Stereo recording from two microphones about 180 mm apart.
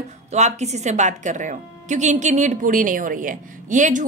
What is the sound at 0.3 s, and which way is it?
A woman's voice, 40° right (ahead or behind).